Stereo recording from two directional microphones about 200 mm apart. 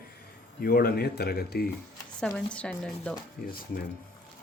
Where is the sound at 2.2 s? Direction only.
Centre (ahead or behind).